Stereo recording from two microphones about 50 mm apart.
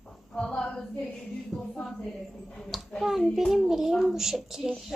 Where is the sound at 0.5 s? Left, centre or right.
Centre.